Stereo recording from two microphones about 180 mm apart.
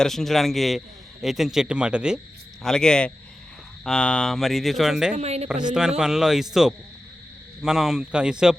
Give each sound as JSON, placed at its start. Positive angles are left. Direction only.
{"t": 0.0, "sound": "speech", "side_deg": 0}
{"t": 5.1, "sound": "speech", "side_deg": -35}
{"t": 6.0, "sound": "speech", "side_deg": -5}